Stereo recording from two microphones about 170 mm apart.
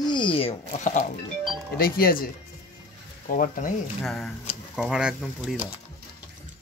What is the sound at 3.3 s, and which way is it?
Speech, 50° left (ahead or behind).